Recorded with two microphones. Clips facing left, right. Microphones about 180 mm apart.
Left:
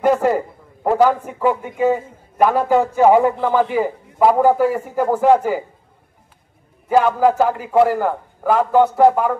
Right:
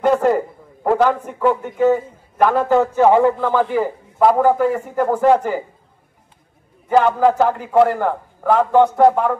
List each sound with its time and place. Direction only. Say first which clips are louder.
0.0 s a man's voice: right 1 dB; 10° left (ahead or behind)
6.9 s a man's voice: even; 5° left (ahead or behind)